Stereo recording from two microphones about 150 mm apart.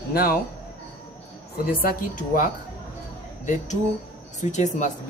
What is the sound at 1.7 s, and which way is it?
Speech, 70° left (ahead or behind).